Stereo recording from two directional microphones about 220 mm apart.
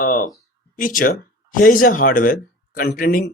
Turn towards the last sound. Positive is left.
turn(degrees=40)  # may be behind; listen again after turning